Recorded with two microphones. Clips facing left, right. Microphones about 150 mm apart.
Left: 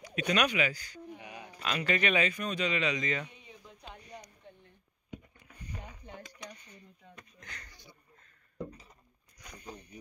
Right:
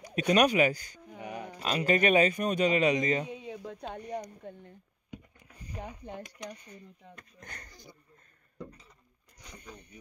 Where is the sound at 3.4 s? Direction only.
85° right.